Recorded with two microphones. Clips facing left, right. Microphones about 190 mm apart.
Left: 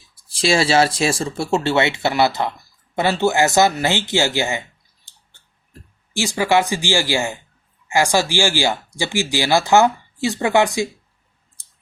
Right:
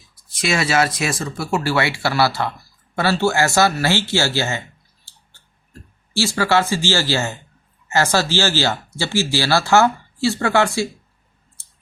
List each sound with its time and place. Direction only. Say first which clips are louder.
0.3 s speech: left 3 dB; 30° left (ahead or behind)
5.1 s a sound: right 2 dB; 20° left (ahead or behind)
6.1 s speech: left 1 dB; 15° left (ahead or behind)
11.6 s clicking: right 2 dB; 15° left (ahead or behind)